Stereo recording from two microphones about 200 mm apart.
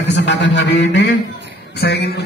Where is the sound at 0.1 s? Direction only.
60° left (ahead or behind).